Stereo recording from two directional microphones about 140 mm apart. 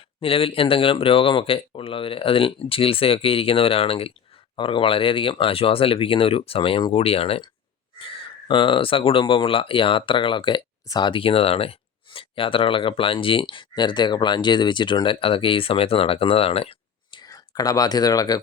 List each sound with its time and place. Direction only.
0.2 s speech: 40° left (ahead or behind)